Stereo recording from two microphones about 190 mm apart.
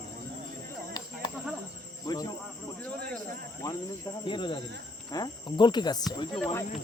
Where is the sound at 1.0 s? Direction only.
20° left (ahead or behind).